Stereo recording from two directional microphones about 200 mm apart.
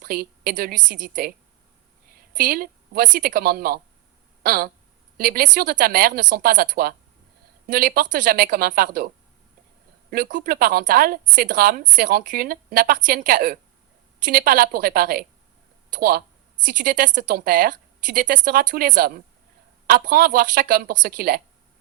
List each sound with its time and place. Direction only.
0.0 s a woman's voice: 50° right (ahead or behind)
2.3 s a woman's voice: 45° right (ahead or behind)
10.1 s a woman's voice: 45° right (ahead or behind)